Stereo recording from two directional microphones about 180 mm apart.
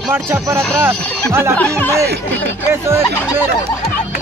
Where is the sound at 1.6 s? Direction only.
10° left (ahead or behind).